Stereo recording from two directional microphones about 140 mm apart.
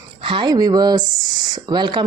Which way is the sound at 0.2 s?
35° right (ahead or behind).